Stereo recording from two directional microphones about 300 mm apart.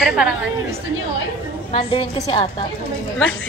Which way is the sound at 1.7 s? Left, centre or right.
Centre.